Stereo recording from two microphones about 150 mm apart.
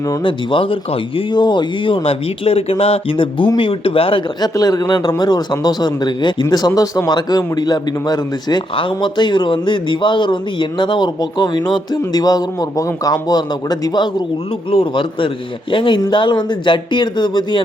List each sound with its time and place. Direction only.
0.2 s speech: 35° left (ahead or behind)